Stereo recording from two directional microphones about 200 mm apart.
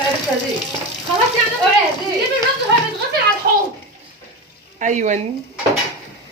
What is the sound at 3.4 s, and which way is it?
Speech, 50° right (ahead or behind).